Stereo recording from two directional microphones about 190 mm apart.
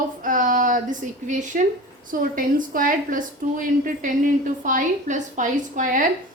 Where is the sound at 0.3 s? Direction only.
45° right (ahead or behind).